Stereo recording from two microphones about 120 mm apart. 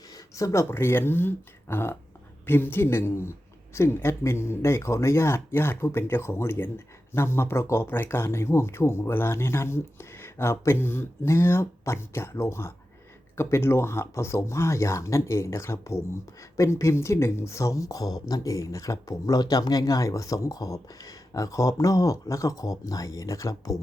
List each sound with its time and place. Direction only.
0.1 s speech: 25° left (ahead or behind)